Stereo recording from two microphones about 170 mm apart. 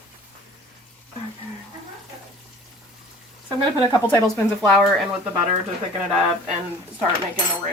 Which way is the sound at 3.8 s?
25° left (ahead or behind).